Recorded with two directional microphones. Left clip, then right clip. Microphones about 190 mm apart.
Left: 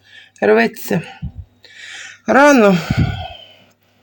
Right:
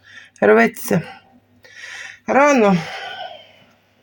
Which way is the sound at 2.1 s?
25° left (ahead or behind).